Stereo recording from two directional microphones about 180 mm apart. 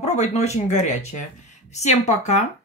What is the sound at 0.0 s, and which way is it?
Speech, 40° left (ahead or behind).